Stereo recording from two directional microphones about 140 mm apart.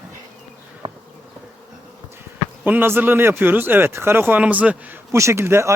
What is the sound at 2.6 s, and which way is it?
A man's voice, 15° right (ahead or behind).